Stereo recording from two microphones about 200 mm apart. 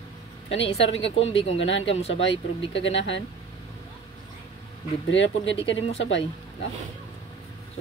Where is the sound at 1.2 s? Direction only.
30° left (ahead or behind).